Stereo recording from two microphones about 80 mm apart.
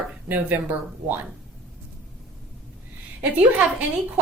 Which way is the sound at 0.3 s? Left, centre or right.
Right.